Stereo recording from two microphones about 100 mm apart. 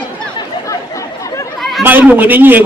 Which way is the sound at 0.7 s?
35° left (ahead or behind).